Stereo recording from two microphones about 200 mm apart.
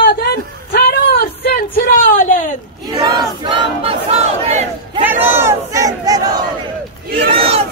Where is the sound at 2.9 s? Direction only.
20° right (ahead or behind).